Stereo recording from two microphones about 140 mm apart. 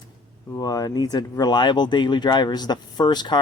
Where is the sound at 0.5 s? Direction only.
25° left (ahead or behind).